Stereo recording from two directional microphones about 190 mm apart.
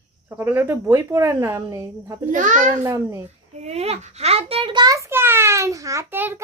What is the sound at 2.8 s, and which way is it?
Speech, 15° right (ahead or behind).